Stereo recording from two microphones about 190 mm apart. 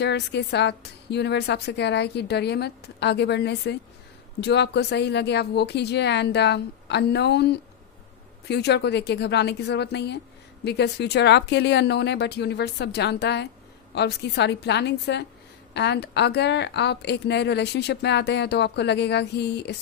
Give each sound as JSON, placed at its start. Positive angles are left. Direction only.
{"t": 0.0, "sound": "a woman's voice", "side_deg": 65}